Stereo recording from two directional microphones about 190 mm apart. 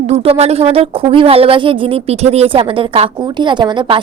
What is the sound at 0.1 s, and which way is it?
Speech, 35° right (ahead or behind).